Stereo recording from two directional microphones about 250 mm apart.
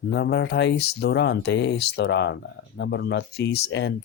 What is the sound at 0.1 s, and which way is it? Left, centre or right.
Speech, left.